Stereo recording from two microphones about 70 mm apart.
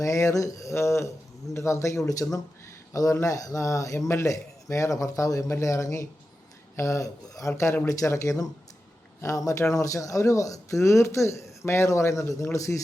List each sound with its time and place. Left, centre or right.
0.0 s speech: left